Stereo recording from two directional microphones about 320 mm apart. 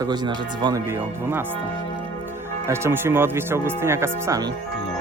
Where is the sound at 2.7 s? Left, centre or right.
Centre.